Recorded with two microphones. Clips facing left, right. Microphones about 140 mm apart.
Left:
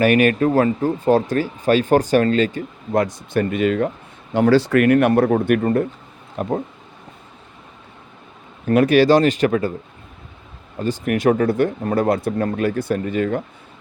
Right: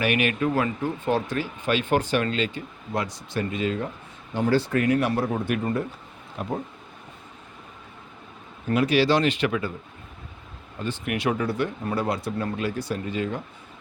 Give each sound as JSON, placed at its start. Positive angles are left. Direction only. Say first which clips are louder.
{"t": 0.0, "sound": "speech", "louder": "left 8 dB", "side_deg": 45}
{"t": 4.4, "sound": "speech", "louder": "left 8 dB", "side_deg": 90}
{"t": 8.7, "sound": "speech", "louder": "left 7 dB", "side_deg": 50}
{"t": 10.8, "sound": "speech", "louder": "left 8 dB", "side_deg": 40}